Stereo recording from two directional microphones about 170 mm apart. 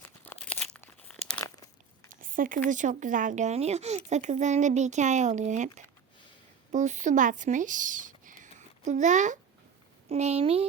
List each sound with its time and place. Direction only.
0.0 s crumpling: 5° left (ahead or behind)
2.2 s a sound: 55° right (ahead or behind)
2.6 s speech: 50° right (ahead or behind)